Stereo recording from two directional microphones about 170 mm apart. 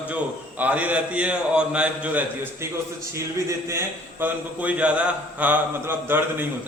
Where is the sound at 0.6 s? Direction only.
10° right (ahead or behind).